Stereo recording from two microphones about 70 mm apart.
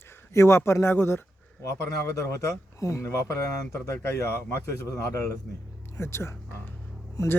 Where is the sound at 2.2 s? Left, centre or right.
Left.